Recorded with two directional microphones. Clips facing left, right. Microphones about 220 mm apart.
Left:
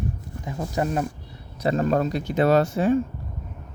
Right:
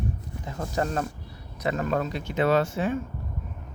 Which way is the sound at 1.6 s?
35° left (ahead or behind).